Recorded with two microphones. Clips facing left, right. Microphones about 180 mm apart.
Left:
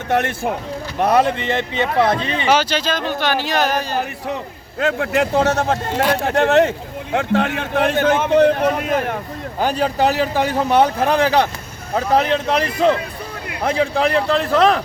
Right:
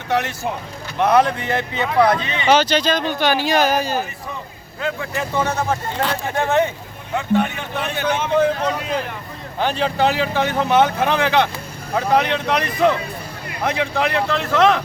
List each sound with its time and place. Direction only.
0.1 s speech: 55° left (ahead or behind)
2.0 s speech: 30° left (ahead or behind)
2.5 s speech: 5° left (ahead or behind)
4.8 s speech: 75° left (ahead or behind)
8.1 s a man's voice: 60° left (ahead or behind)
9.6 s speech: 40° left (ahead or behind)